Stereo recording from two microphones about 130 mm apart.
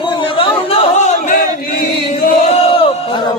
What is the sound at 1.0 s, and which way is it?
Battle cry, 65° left (ahead or behind).